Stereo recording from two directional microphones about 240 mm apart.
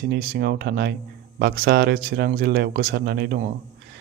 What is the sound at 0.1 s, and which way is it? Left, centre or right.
Speech, right.